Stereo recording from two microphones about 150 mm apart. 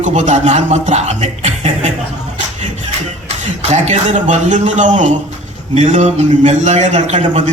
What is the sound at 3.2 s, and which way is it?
A man's voice, 50° right (ahead or behind).